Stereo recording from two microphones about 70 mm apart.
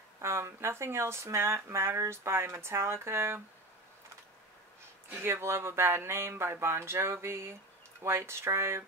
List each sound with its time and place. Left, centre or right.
0.2 s speech: right
5.1 s speech: right